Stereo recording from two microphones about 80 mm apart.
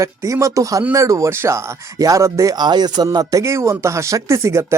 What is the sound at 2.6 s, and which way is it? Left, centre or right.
Speech, right.